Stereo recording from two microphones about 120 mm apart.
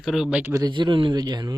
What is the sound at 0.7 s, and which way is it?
Speech, 40° right (ahead or behind).